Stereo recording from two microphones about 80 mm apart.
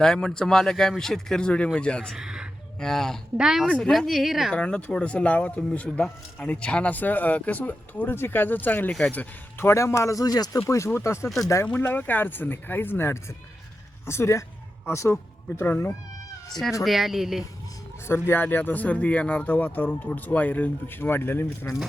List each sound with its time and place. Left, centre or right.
0.0 s speech: centre
2.1 s a sound: centre
2.8 s speech: centre
3.3 s speech: centre
3.7 s speech: centre
4.5 s speech: centre
8.9 s speech: centre
9.1 s speech: left
10.7 s speech: left
11.9 s speech: left
16.5 s speech: centre
18.3 s speech: left